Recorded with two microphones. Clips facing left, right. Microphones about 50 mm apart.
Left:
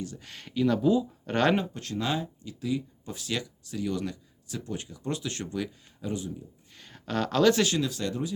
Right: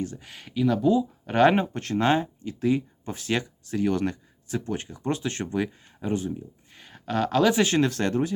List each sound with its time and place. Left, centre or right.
0.2 s speech: centre
1.5 s speech: right
6.7 s a sound: centre
7.8 s speech: right